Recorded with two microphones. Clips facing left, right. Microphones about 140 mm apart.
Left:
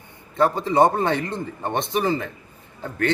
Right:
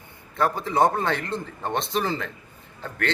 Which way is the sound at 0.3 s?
20° left (ahead or behind).